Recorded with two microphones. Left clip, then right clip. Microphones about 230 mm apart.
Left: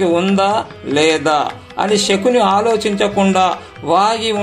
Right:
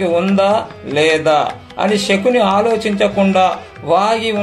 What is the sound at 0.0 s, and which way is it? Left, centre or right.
Speech, left.